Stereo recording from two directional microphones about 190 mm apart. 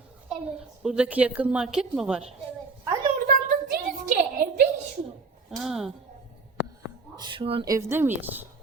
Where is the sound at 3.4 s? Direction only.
45° right (ahead or behind).